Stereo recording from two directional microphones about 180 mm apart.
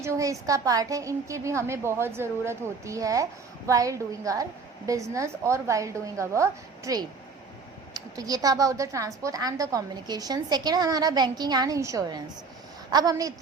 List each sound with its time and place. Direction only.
0.0 s a woman's voice: 15° right (ahead or behind)